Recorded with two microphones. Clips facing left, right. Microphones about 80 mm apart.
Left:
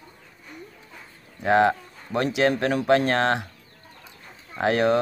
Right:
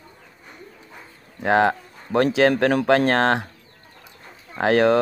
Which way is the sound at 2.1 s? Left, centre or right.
Right.